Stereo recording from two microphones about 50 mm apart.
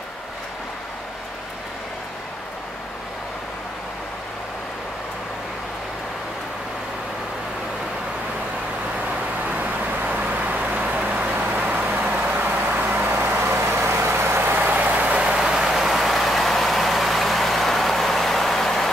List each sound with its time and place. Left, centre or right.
9.6 s vehicle: right
13.7 s vehicle: right
15.1 s vehicle: centre